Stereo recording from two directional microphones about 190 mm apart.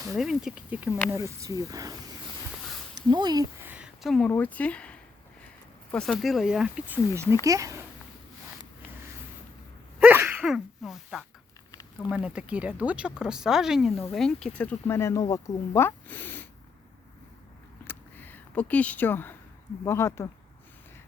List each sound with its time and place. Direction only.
0.1 s speech: centre (ahead or behind); by 3.4 s 20° right (ahead or behind)
3.6 s speech: 5° right (ahead or behind)
10.0 s sneeze: 10° right (ahead or behind)
11.7 s a sound: 20° left (ahead or behind)
12.1 s speech: 5° right (ahead or behind); by 16.5 s 10° left (ahead or behind)
17.8 s a sound: 10° left (ahead or behind)
19.8 s speech: 15° left (ahead or behind)